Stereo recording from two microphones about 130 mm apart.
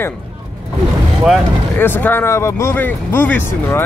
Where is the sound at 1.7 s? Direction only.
15° left (ahead or behind).